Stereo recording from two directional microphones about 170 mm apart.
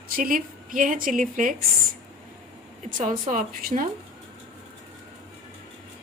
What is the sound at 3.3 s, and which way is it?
Speech, 50° right (ahead or behind).